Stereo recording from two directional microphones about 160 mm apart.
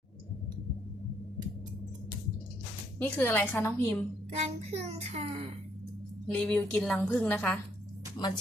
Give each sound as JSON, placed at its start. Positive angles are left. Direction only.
{"t": 3.0, "sound": "a woman's voice", "side_deg": 10}
{"t": 4.4, "sound": "a child's voice", "side_deg": -45}
{"t": 6.2, "sound": "a woman's voice", "side_deg": 10}
{"t": 8.2, "sound": "speech", "side_deg": 25}